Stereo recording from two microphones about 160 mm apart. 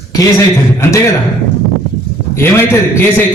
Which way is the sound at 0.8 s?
15° left (ahead or behind).